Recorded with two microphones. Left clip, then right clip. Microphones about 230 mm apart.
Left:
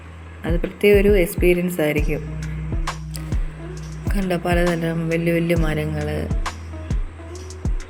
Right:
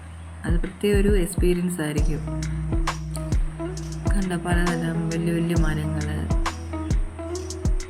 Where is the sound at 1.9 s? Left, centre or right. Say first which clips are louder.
Left 5 dB; centre.